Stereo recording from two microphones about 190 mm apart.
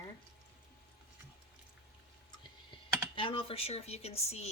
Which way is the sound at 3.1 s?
30° left (ahead or behind).